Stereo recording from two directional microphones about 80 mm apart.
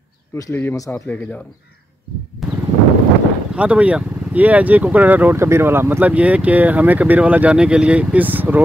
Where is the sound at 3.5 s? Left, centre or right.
Centre.